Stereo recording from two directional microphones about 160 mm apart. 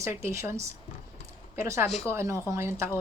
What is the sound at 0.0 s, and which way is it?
Speech, 15° right (ahead or behind).